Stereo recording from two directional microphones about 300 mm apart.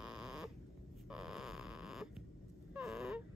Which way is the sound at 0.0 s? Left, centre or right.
Centre.